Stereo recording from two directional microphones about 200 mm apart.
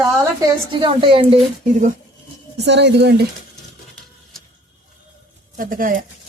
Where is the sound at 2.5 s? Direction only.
60° right (ahead or behind).